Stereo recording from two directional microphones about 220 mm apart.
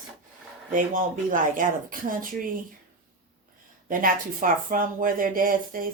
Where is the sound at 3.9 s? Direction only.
40° right (ahead or behind).